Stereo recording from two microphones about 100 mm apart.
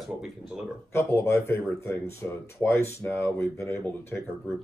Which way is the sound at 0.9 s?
25° left (ahead or behind).